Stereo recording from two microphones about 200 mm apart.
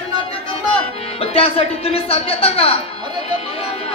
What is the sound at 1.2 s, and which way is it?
Speech, 30° left (ahead or behind).